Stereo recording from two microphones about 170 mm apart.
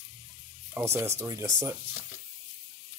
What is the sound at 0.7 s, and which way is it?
Speech, 15° right (ahead or behind).